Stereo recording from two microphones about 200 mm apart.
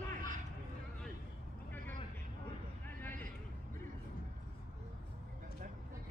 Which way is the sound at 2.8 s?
10° left (ahead or behind).